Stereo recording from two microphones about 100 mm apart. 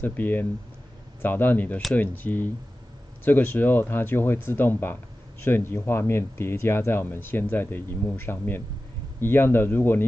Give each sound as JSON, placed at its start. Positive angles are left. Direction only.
{"t": 0.0, "sound": "speech", "side_deg": 20}